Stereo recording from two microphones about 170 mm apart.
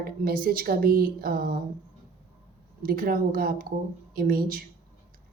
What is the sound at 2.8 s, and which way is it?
A woman's voice, 60° right (ahead or behind).